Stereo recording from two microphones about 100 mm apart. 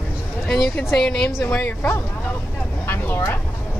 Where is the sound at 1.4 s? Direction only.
15° left (ahead or behind).